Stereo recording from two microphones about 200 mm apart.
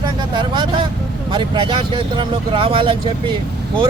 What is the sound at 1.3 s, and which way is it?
Speech, 25° right (ahead or behind).